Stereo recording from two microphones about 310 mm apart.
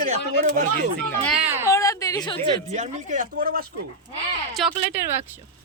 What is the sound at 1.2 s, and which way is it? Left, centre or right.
A woman's voice, centre.